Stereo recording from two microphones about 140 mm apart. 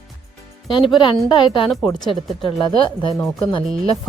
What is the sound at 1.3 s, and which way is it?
Speech, 35° left (ahead or behind).